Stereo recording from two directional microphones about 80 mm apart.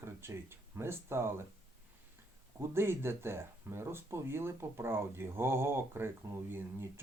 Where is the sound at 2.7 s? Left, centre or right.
Right.